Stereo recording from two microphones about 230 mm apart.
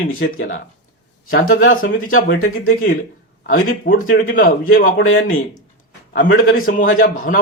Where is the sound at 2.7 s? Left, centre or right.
Left.